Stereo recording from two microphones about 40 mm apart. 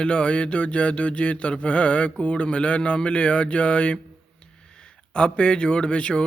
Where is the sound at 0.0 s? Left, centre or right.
Left.